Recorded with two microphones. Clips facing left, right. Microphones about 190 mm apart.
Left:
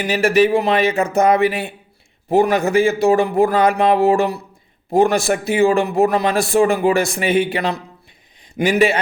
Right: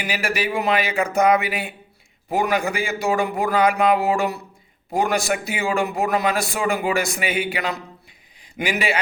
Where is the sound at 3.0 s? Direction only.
35° left (ahead or behind).